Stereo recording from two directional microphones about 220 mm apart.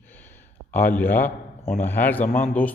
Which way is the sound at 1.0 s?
10° left (ahead or behind).